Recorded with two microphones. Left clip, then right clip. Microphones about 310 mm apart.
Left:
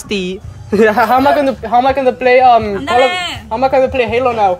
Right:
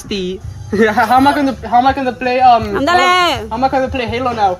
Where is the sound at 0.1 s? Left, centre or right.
Left.